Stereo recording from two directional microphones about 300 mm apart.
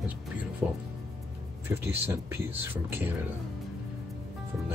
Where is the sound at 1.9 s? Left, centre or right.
Centre.